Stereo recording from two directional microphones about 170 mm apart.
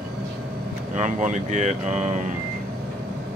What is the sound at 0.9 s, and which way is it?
Speech, 45° right (ahead or behind).